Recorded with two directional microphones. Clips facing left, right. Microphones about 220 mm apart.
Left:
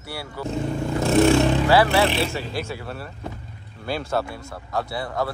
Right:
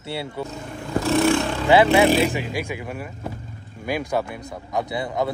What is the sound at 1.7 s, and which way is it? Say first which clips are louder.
Speech: right 8 dB; 20° right (ahead or behind).